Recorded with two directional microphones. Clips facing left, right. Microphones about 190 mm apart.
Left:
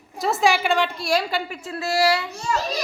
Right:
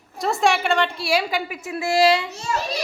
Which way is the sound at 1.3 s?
15° right (ahead or behind).